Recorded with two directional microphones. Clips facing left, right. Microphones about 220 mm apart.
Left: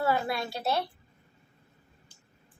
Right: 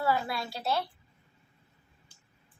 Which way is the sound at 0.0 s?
20° left (ahead or behind).